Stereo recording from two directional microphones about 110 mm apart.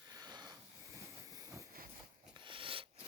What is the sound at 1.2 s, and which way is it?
Train, 35° right (ahead or behind).